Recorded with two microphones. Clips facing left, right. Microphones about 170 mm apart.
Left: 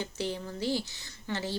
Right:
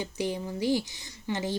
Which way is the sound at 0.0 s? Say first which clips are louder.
Right 3 dB; 15° right (ahead or behind).